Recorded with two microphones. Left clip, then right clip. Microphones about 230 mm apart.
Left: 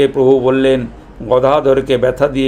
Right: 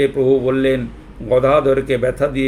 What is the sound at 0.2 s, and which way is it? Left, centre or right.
Speech, centre.